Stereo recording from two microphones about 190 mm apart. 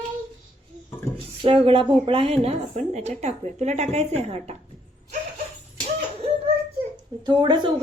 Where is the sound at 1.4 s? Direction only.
30° right (ahead or behind).